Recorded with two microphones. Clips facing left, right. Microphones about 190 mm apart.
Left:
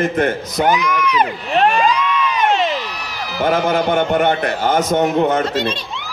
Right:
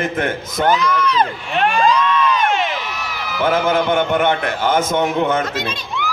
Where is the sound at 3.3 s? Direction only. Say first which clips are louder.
Even; 40° left (ahead or behind).